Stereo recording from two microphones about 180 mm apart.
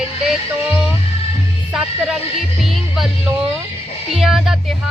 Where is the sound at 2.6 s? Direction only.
Centre (ahead or behind).